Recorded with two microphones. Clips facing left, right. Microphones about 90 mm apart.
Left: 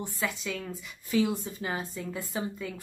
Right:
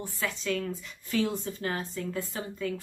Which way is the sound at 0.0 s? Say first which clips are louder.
Even; 15° left (ahead or behind).